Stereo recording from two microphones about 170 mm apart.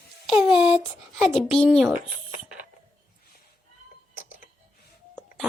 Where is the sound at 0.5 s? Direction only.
5° right (ahead or behind).